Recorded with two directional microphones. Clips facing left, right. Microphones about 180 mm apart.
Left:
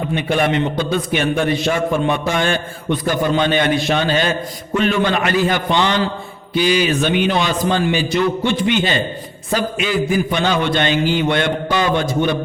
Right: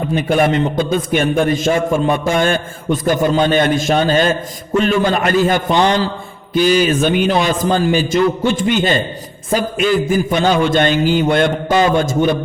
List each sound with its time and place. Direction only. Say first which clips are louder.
0.1 s a man's voice: right 4 dB; 40° right (ahead or behind)